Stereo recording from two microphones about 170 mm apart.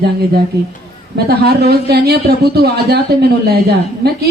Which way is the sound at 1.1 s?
70° right (ahead or behind).